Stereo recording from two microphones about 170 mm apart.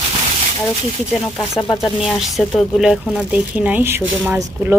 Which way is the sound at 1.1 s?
Centre (ahead or behind).